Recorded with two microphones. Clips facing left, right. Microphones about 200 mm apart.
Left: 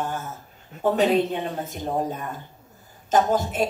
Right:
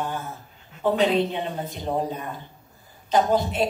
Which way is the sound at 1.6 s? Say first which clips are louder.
Even; 45° left (ahead or behind).